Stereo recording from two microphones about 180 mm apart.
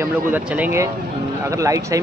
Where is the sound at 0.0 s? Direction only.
10° right (ahead or behind).